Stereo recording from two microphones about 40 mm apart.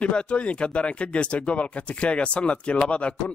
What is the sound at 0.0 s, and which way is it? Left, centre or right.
A man's voice, left.